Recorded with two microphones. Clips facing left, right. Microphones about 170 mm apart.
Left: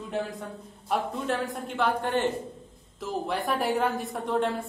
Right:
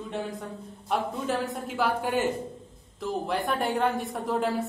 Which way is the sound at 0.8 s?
Centre (ahead or behind).